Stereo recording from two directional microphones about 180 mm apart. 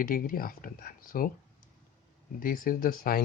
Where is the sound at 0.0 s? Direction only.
50° left (ahead or behind).